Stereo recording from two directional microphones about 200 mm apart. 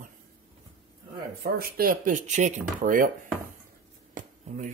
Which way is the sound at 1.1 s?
50° right (ahead or behind).